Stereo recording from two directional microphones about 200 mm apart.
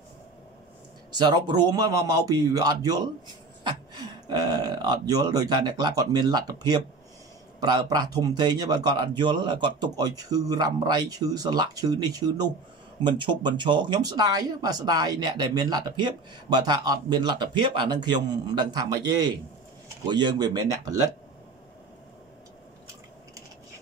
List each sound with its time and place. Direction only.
1.1 s speech: 20° right (ahead or behind)